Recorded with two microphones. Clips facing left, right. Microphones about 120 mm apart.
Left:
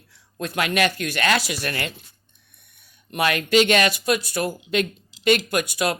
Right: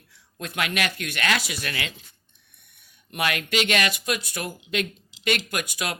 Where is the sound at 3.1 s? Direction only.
35° left (ahead or behind).